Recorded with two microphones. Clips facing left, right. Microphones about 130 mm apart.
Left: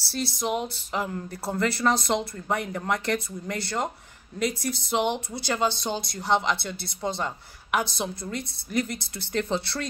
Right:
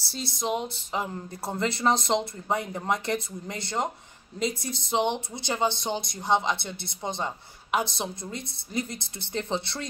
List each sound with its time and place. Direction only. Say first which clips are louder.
0.2 s speech: left 1 dB; 20° right (ahead or behind)